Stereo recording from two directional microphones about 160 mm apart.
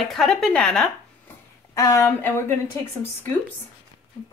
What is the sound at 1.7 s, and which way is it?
Speech, 20° left (ahead or behind).